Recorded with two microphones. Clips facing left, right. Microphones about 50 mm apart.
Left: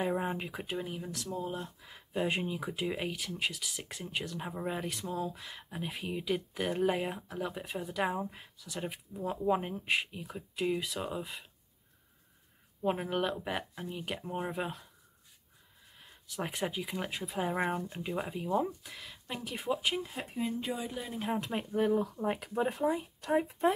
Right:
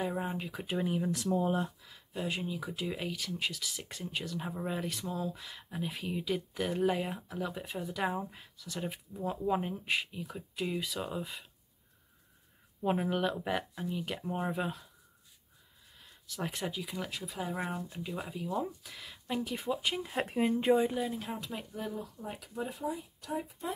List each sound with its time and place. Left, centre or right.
0.1 s speech: centre
1.0 s speech: centre
1.3 s speech: right
1.8 s speech: left; by 11.4 s centre
12.8 s speech: centre
13.8 s speech: centre
16.3 s speech: centre
18.8 s speech: centre
20.3 s speech: right
21.2 s speech: left